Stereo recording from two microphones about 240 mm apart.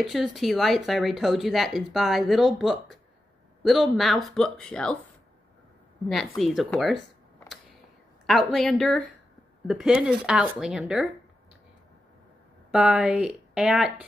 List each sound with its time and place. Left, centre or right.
0.0 s speech: centre
6.0 s speech: centre
8.3 s speech: centre
12.7 s speech: centre